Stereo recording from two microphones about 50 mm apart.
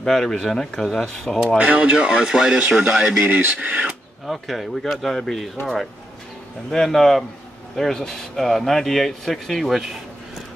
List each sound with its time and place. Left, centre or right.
0.0 s speech: centre
1.6 s speech: right
3.3 s speech: right
4.3 s speech: centre
6.7 s speech: centre